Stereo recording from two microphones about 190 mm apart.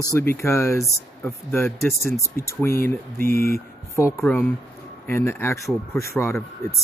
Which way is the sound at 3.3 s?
50° left (ahead or behind).